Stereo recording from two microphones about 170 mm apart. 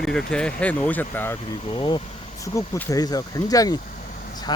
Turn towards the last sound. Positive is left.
turn(degrees=25)  # may be behind; listen again after turning